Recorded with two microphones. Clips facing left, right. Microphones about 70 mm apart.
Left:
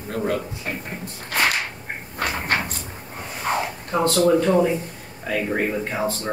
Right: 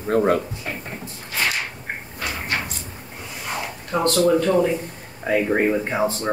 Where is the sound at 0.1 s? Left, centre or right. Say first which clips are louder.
Right 6 dB; right.